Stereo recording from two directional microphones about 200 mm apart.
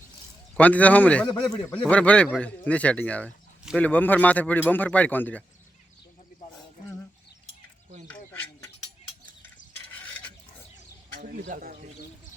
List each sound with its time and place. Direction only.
0.5 s speech: 5° left (ahead or behind)
8.0 s a sound: 10° left (ahead or behind)
11.1 s bird: 50° right (ahead or behind)